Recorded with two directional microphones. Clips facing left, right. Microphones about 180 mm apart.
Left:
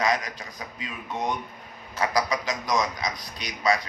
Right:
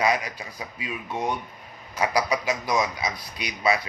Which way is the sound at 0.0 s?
10° right (ahead or behind).